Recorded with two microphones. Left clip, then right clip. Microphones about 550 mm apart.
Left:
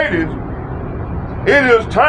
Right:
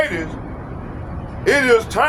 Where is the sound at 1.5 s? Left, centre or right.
Right.